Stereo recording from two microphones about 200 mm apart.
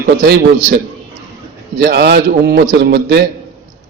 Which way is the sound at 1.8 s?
55° right (ahead or behind).